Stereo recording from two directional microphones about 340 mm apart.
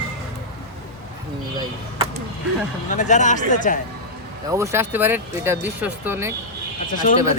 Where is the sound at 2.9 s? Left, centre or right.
Left.